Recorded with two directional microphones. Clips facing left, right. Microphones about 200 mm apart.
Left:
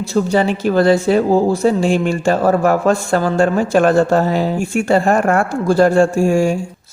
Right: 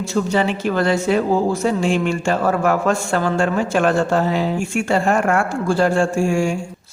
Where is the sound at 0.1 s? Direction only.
40° left (ahead or behind).